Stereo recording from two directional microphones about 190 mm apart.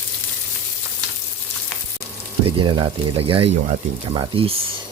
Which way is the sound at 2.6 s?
25° right (ahead or behind).